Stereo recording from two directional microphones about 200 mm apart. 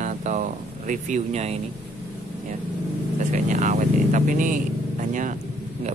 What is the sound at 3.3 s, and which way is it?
Speech, 35° right (ahead or behind).